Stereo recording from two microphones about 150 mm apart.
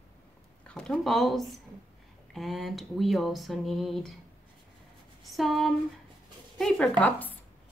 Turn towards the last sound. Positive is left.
turn(degrees=10)  # may be behind; listen again after turning